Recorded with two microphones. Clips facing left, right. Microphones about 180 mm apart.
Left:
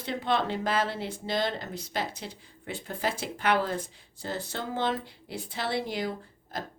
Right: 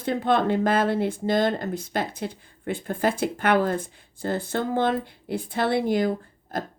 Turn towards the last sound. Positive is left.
turn(degrees=-50)  # may be behind; listen again after turning